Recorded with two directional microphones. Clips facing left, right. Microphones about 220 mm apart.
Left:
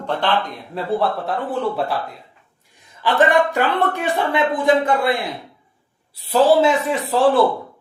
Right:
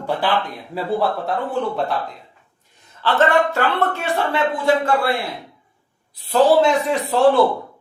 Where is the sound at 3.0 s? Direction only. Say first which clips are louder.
Left 1 dB; 15° left (ahead or behind).